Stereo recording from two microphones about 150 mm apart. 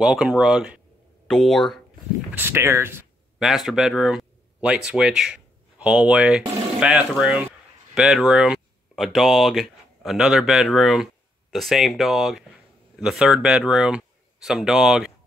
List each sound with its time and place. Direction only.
0.0 s speech: 5° right (ahead or behind)
2.3 s speech: 15° right (ahead or behind)
3.3 s speech: centre (ahead or behind)